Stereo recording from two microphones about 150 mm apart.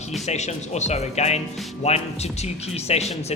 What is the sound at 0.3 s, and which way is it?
Speech, 50° left (ahead or behind).